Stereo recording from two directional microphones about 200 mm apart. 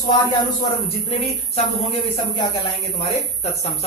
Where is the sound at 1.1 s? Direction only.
30° left (ahead or behind).